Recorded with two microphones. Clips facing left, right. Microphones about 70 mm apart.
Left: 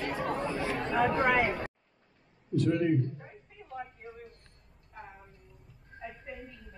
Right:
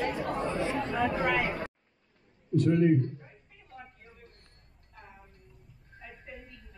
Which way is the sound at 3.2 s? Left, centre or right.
Left.